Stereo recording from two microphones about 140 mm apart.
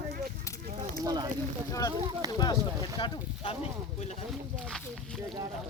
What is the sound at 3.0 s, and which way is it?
Speech, 35° left (ahead or behind).